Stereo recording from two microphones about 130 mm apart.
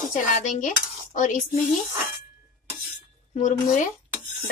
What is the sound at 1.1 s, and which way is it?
Dishes, 80° left.